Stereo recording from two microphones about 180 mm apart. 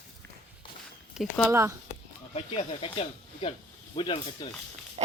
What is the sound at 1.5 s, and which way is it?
Speech, 15° right (ahead or behind).